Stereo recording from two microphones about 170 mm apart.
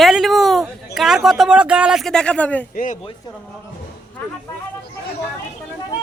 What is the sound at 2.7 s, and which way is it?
Speech, 50° left (ahead or behind).